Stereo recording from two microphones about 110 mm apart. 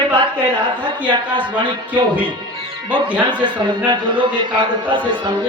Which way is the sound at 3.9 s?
45° right (ahead or behind).